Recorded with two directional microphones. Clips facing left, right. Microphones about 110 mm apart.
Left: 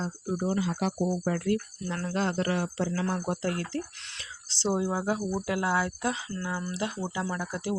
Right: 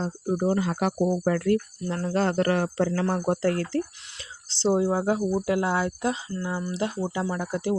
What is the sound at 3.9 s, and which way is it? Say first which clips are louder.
Speech: left 1 dB; 10° right (ahead or behind).